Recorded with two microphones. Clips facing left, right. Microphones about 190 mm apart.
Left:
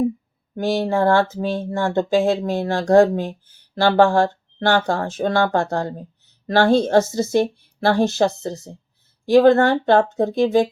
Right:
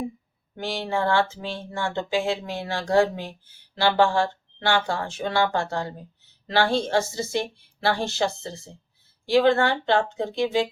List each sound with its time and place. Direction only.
0.6 s speech: 45° left (ahead or behind)